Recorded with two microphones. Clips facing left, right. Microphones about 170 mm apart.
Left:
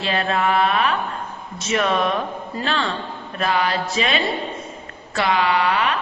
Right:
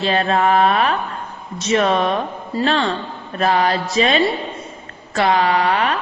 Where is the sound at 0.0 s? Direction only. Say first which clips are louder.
Right 4 dB; 35° right (ahead or behind).